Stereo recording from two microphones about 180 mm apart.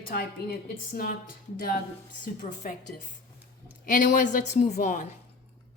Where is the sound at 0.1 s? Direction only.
55° left (ahead or behind).